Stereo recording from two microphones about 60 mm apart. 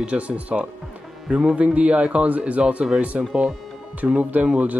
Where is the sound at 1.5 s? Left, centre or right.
Right.